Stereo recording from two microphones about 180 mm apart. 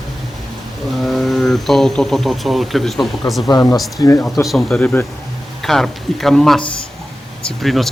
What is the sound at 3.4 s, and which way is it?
Speech, 20° left (ahead or behind).